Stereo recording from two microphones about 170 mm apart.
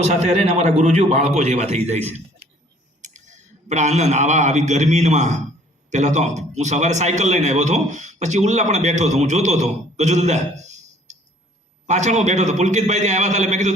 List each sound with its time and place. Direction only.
0.0 s a man's voice: 40° right (ahead or behind)